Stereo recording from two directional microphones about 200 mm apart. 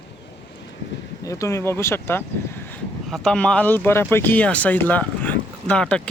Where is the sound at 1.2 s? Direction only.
15° left (ahead or behind).